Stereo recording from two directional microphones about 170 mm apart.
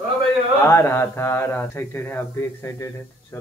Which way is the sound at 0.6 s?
15° left (ahead or behind).